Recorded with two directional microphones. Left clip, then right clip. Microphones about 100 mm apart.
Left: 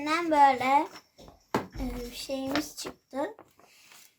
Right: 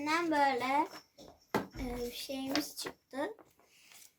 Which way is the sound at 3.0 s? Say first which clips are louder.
Left 6 dB; 45° left (ahead or behind).